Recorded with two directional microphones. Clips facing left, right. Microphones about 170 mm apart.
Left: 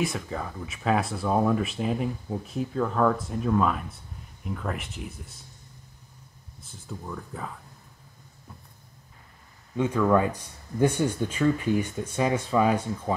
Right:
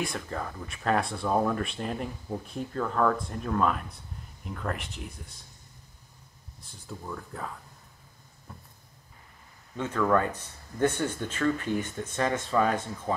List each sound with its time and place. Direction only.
0.0 s speech: centre (ahead or behind)
6.6 s speech: centre (ahead or behind)
9.8 s speech: 10° left (ahead or behind)